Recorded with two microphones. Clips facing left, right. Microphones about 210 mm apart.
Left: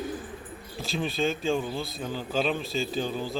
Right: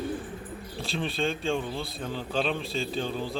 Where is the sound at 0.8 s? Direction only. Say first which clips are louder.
Left 2 dB; centre (ahead or behind).